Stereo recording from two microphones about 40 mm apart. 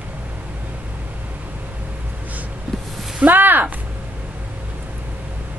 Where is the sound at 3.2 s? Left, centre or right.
Right.